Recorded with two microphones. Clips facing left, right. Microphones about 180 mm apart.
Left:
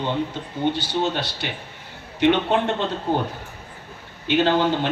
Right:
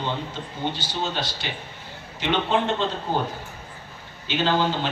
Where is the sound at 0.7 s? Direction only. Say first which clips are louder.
Left 5 dB; 60° left (ahead or behind).